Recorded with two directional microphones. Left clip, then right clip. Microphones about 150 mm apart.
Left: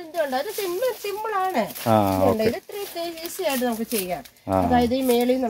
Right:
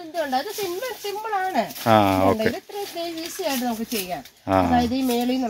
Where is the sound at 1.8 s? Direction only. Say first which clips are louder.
Right 2 dB; 5° right (ahead or behind).